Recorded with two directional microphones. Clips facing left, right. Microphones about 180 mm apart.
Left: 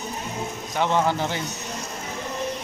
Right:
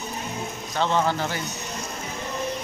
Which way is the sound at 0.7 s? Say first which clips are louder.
Left 1 dB; 15° left (ahead or behind).